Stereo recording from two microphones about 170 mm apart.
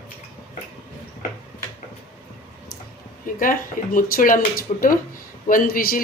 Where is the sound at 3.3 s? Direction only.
55° left (ahead or behind).